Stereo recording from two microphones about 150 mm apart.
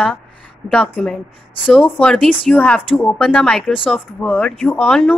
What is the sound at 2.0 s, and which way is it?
Speech, 5° left (ahead or behind).